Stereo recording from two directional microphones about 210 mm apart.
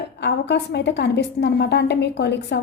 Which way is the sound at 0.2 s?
55° left (ahead or behind).